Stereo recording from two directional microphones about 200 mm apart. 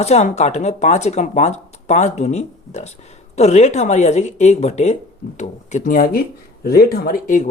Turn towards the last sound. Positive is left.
turn(degrees=45)  # may be behind; listen again after turning